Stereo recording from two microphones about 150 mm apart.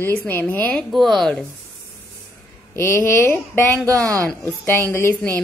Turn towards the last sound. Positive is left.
turn(degrees=10)  # may be behind; listen again after turning